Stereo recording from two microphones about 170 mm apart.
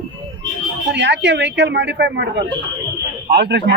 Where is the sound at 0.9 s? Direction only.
90° right.